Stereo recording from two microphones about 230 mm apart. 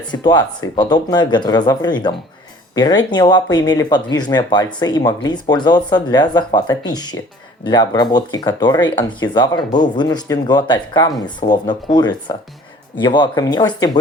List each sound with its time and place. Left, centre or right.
0.1 s speech: centre